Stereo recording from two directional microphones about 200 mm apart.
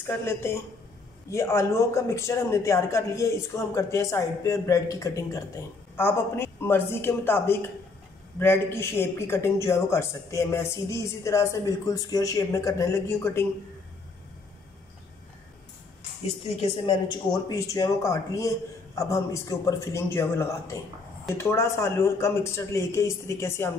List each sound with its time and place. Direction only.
0.0 s a man's voice: 10° left (ahead or behind)
16.4 s a man's voice: 25° left (ahead or behind)